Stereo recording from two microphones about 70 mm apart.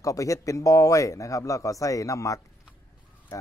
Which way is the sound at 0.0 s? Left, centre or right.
Left.